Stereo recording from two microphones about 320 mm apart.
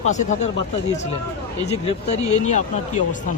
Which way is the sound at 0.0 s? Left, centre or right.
Left.